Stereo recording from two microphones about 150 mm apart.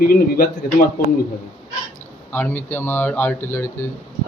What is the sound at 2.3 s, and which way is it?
Speech, 15° left (ahead or behind).